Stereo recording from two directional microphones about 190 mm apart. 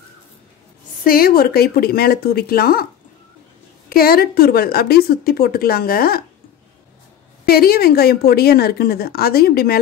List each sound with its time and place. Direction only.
1.0 s a woman's voice: 50° left (ahead or behind)
3.9 s a woman's voice: 50° left (ahead or behind)
7.4 s a woman's voice: 50° left (ahead or behind)